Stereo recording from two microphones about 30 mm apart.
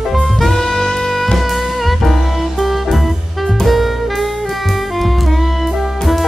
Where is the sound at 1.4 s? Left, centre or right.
Centre.